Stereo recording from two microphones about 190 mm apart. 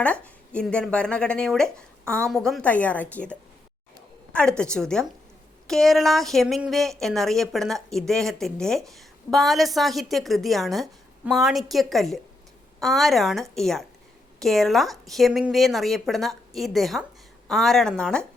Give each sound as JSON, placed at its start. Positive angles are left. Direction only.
{"t": 0.0, "sound": "a woman's voice", "side_deg": 5}